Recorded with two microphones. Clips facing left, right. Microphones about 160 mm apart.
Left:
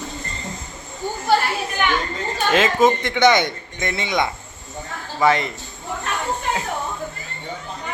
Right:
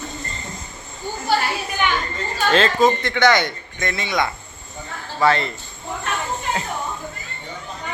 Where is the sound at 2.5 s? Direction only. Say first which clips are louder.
Even; 15° left (ahead or behind).